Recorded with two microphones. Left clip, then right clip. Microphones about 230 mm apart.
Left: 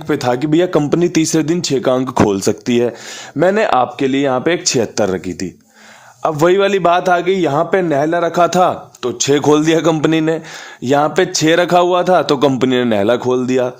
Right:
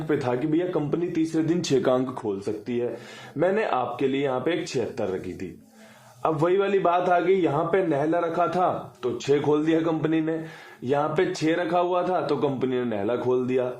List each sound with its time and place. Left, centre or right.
0.1 s a man's voice: left
1.6 s speech: left
2.3 s a man's voice: left